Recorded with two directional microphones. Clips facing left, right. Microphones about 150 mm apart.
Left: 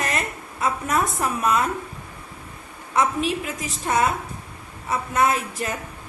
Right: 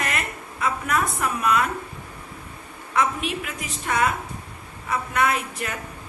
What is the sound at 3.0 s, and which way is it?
A woman's voice, 35° left (ahead or behind).